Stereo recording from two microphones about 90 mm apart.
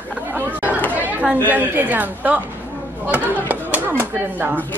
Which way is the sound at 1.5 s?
20° right (ahead or behind).